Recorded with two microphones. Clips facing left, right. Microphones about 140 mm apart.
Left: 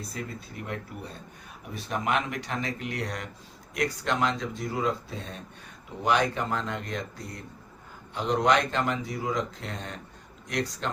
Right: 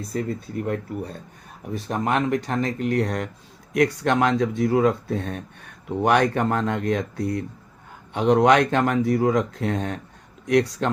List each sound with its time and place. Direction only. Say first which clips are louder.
0.1 s speech: right 10 dB; 45° right (ahead or behind)
1.9 s speech: right 6 dB; 40° right (ahead or behind)
3.8 s speech: right 8 dB; 55° right (ahead or behind)